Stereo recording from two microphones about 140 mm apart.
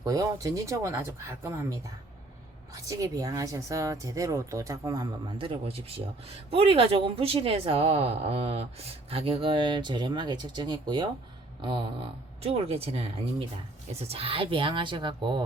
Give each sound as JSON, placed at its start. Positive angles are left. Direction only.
{"t": 0.0, "sound": "speech", "side_deg": -25}
{"t": 2.9, "sound": "speech", "side_deg": -25}
{"t": 12.4, "sound": "a woman's voice", "side_deg": -45}